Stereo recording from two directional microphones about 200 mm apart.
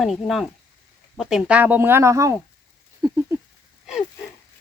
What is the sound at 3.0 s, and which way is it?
Patter, 20° right (ahead or behind).